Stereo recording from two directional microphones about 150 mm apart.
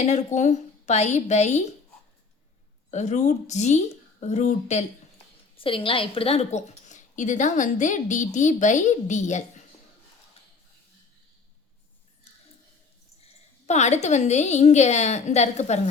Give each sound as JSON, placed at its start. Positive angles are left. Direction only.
{"t": 0.0, "sound": "a woman's voice", "side_deg": 50}
{"t": 2.9, "sound": "a woman's voice", "side_deg": 50}
{"t": 5.5, "sound": "a woman's voice", "side_deg": 35}
{"t": 13.2, "sound": "a woman's voice", "side_deg": 50}